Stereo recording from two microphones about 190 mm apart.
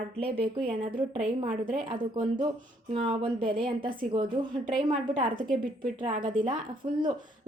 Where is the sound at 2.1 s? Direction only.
25° right (ahead or behind).